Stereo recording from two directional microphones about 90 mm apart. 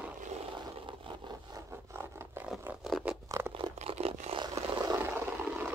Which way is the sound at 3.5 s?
80° right.